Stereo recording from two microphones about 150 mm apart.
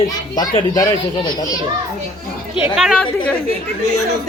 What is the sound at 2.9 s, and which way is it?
Speech, 10° left (ahead or behind).